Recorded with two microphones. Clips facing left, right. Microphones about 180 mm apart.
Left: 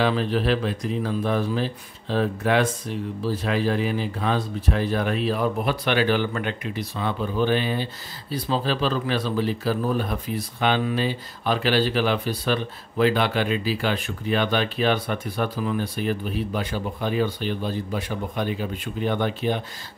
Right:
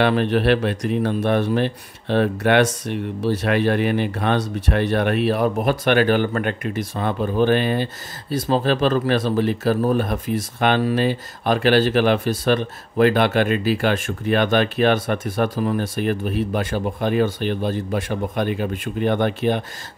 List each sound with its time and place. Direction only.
0.0 s speech: 65° right (ahead or behind)
5.6 s speech: 50° right (ahead or behind)